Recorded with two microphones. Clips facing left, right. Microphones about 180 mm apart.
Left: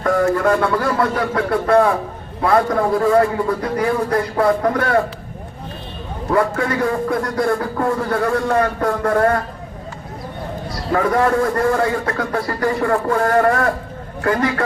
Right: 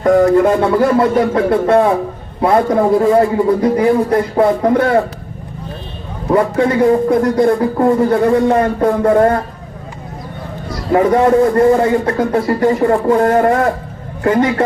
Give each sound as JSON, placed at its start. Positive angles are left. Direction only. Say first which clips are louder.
{"t": 0.0, "sound": "a man's voice", "louder": "right 7 dB", "side_deg": -20}
{"t": 6.3, "sound": "a man's voice", "louder": "right 5 dB", "side_deg": -20}
{"t": 10.9, "sound": "a man's voice", "louder": "right 6 dB", "side_deg": -25}